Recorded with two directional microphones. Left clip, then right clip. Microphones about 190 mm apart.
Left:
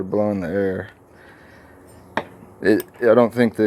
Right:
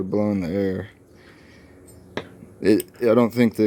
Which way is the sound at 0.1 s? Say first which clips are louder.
Left 4 dB; 45° right (ahead or behind).